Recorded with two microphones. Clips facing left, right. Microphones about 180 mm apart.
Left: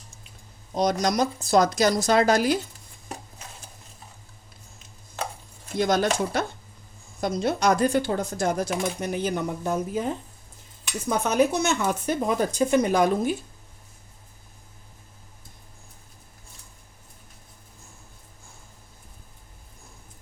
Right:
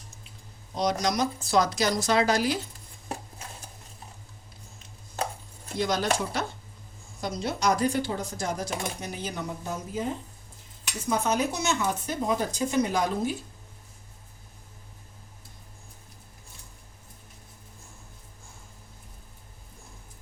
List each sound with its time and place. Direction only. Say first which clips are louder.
0.8 s speech: left 3 dB; 50° left (ahead or behind)
5.7 s speech: left 4 dB; 50° left (ahead or behind)
11.1 s speech: left 5 dB; 60° left (ahead or behind)